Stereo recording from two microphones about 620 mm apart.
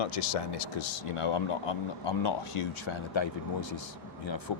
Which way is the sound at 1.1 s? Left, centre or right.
Left.